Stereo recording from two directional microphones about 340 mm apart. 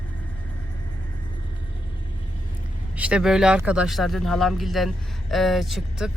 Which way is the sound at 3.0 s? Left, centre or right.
Centre.